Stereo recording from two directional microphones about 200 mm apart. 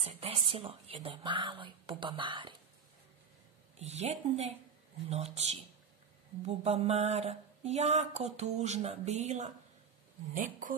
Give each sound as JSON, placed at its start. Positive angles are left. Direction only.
{"t": 0.0, "sound": "speech", "side_deg": -30}
{"t": 3.8, "sound": "speech", "side_deg": -35}